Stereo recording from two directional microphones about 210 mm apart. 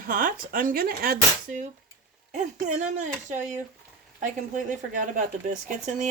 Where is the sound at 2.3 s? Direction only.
35° right (ahead or behind).